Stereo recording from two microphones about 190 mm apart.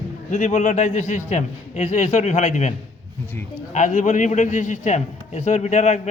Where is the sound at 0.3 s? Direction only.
40° left (ahead or behind).